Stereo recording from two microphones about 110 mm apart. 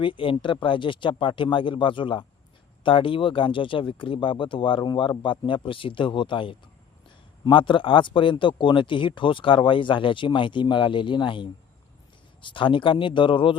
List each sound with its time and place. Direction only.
0.0 s speech: 50° left (ahead or behind)